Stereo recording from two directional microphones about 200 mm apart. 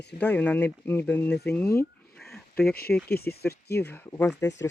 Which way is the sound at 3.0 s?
50° left (ahead or behind).